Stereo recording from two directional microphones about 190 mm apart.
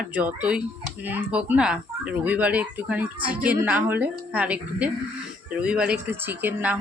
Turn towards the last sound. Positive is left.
turn(degrees=-10)  # may be behind; listen again after turning